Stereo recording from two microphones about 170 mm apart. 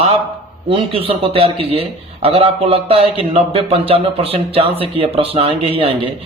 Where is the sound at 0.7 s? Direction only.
35° right (ahead or behind).